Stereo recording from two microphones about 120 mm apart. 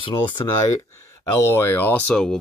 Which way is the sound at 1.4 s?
20° left (ahead or behind).